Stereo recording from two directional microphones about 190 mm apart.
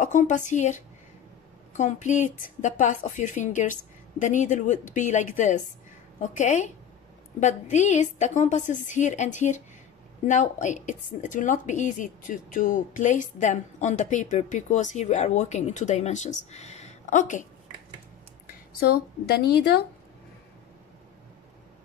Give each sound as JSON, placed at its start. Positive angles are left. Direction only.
{"t": 0.0, "sound": "a woman's voice", "side_deg": 40}
{"t": 18.5, "sound": "speech", "side_deg": 55}